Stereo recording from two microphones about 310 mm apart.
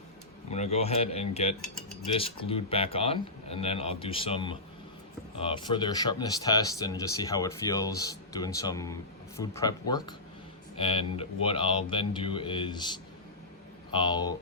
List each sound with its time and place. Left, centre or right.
0.5 s speech: left